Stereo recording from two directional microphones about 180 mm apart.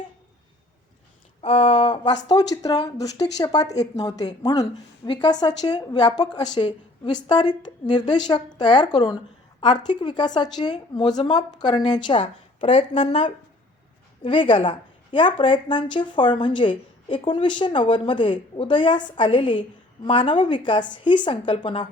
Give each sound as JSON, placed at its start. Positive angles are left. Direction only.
{"t": 1.4, "sound": "speech", "side_deg": 35}